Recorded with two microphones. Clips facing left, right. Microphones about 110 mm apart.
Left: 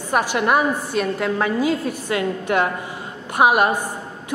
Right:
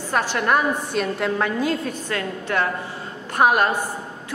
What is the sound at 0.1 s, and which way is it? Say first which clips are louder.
A woman's voice: left 2 dB; 10° left (ahead or behind).